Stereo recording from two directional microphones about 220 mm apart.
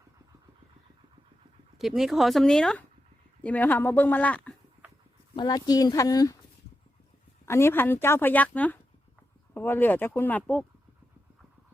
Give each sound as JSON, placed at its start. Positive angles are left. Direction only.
{"t": 1.8, "sound": "a woman's voice", "side_deg": 0}
{"t": 5.3, "sound": "a woman's voice", "side_deg": 20}
{"t": 7.4, "sound": "a woman's voice", "side_deg": 10}